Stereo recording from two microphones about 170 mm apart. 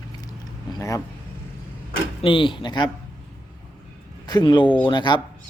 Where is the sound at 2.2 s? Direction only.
30° left (ahead or behind).